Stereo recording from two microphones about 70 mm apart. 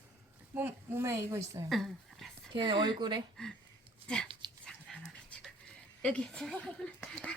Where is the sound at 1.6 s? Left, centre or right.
Centre.